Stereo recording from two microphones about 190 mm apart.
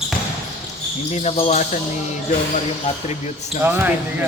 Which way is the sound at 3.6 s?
10° right (ahead or behind).